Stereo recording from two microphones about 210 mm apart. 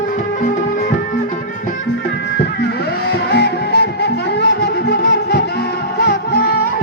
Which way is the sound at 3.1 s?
50° left (ahead or behind).